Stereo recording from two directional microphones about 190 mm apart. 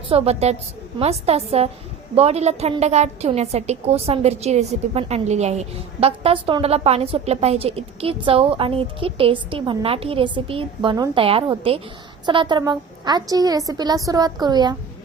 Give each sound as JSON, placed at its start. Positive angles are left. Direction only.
{"t": 0.1, "sound": "a woman's voice", "side_deg": -35}